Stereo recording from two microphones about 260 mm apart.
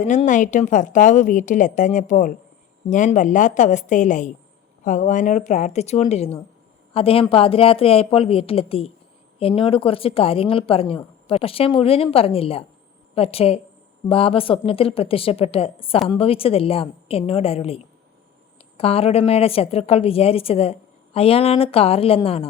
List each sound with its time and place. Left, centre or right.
0.0 s speech: left
18.8 s speech: left